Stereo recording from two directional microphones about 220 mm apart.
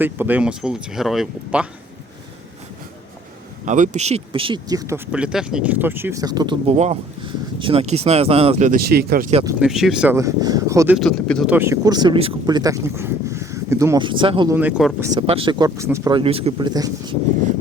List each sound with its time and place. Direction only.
0.0 s speech: 10° right (ahead or behind)
3.7 s speech: 30° right (ahead or behind); by 4.9 s 15° right (ahead or behind)
5.1 s speech: 5° right (ahead or behind); by 6.7 s 20° right (ahead or behind)
6.7 s speech: 30° right (ahead or behind); by 9.2 s 45° right (ahead or behind)
9.3 s speech: 15° right (ahead or behind)
9.6 s speech: centre (ahead or behind)
10.9 s speech: centre (ahead or behind); by 14.5 s 20° right (ahead or behind)
14.5 s speech: 5° right (ahead or behind)
15.3 s speech: 25° right (ahead or behind)